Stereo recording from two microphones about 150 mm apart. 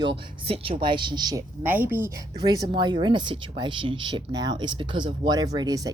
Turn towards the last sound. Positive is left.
turn(degrees=-25)  # may be behind; listen again after turning